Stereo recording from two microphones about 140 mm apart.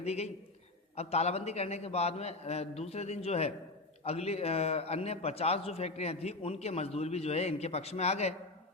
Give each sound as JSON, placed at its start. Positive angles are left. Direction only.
{"t": 0.0, "sound": "a man's voice", "side_deg": 50}